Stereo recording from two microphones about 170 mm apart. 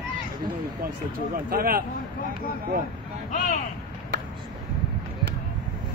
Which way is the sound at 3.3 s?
50° left (ahead or behind).